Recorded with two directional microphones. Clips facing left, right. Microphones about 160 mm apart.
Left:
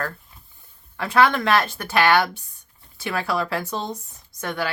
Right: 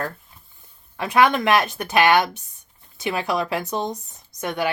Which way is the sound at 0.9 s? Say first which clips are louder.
Right 1 dB; 15° right (ahead or behind).